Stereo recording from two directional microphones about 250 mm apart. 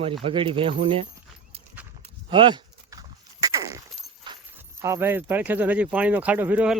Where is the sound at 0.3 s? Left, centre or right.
Right.